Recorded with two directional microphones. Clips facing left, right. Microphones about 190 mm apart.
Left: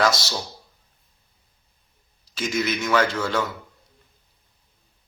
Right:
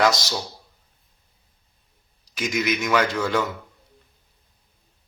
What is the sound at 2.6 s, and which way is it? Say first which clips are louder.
Speech: even; 15° right (ahead or behind).